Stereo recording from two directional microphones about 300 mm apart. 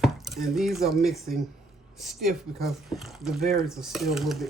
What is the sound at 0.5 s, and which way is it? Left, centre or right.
Speech, centre.